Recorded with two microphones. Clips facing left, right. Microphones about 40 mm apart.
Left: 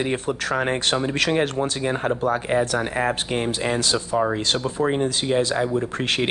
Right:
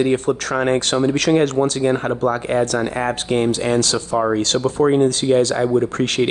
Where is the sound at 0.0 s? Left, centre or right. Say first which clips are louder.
Right 6 dB; centre.